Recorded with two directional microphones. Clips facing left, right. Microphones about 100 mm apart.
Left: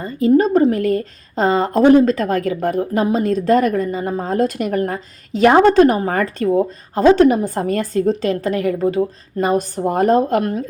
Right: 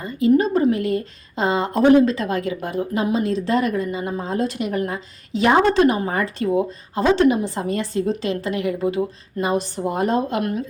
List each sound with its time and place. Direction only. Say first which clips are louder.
0.0 s a woman's voice: left 3 dB; 40° left (ahead or behind)